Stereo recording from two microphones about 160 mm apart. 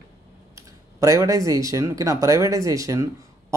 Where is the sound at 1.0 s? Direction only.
20° right (ahead or behind).